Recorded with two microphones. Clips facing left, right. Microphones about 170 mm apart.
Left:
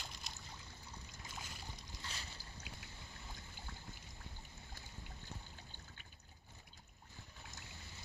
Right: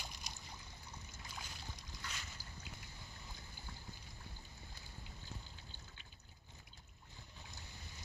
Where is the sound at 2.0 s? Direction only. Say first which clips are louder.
Right 1 dB; 30° left (ahead or behind).